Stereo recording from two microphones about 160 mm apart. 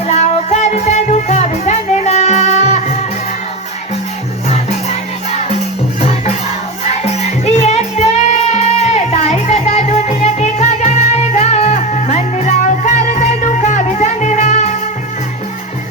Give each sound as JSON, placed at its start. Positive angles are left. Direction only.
{"t": 0.1, "sound": "music", "side_deg": 45}
{"t": 6.0, "sound": "music", "side_deg": 40}